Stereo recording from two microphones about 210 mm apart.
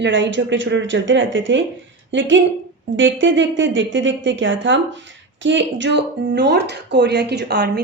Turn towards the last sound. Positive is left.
turn(degrees=-55)  # may be behind; listen again after turning